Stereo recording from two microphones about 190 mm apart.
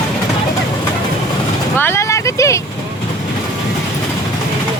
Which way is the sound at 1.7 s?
10° left (ahead or behind).